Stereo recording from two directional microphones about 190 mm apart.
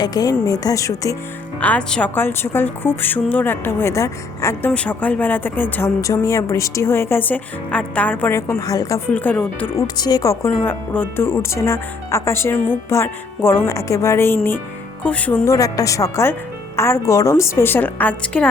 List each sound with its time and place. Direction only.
0.0 s a woman's voice: 20° left (ahead or behind)
9.7 s a woman's voice: 20° left (ahead or behind)